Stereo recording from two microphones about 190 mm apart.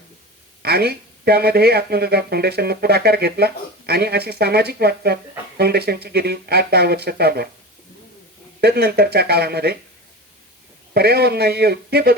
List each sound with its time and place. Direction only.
0.6 s speech: 55° right (ahead or behind)
8.6 s speech: 55° right (ahead or behind)
10.9 s speech: 55° right (ahead or behind)